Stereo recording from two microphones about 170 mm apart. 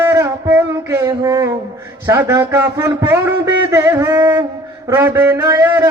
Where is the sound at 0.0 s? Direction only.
15° right (ahead or behind).